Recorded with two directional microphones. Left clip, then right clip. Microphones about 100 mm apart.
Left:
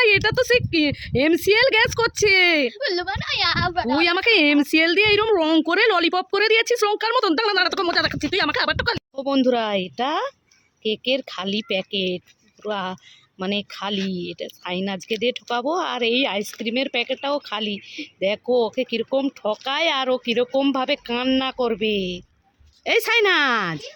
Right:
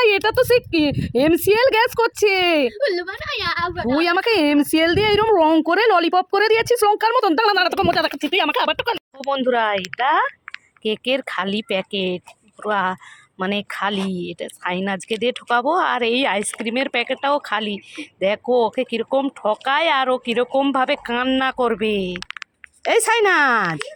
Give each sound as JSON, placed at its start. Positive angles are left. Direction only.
{"t": 0.0, "sound": "speech", "side_deg": -15}
{"t": 2.7, "sound": "a woman's voice", "side_deg": 30}
{"t": 3.9, "sound": "speech", "side_deg": -10}
{"t": 5.4, "sound": "speech", "side_deg": 15}
{"t": 5.6, "sound": "speech", "side_deg": -5}
{"t": 9.3, "sound": "speech", "side_deg": 30}
{"t": 21.9, "sound": "speech", "side_deg": -40}
{"t": 22.8, "sound": "speech", "side_deg": 0}